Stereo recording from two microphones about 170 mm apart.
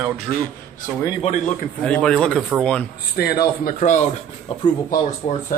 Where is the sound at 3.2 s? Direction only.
65° left (ahead or behind).